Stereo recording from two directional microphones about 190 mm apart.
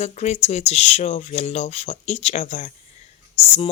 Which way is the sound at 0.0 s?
35° left (ahead or behind).